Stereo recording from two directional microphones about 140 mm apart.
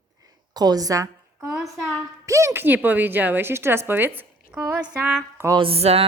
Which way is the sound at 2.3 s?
20° right (ahead or behind).